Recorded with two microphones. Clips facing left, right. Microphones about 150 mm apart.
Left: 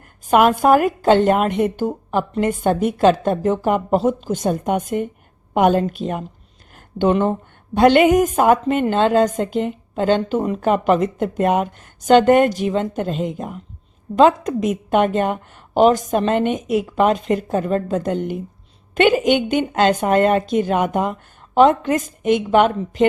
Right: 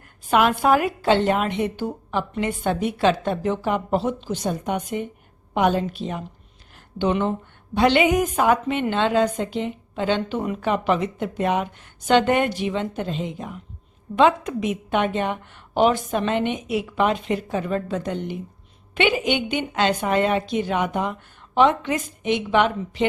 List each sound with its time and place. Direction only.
0.3 s a woman's voice: 45° left (ahead or behind)